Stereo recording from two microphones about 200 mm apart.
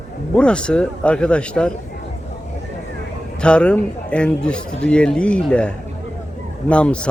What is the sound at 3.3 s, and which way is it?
A man's voice, 5° left (ahead or behind).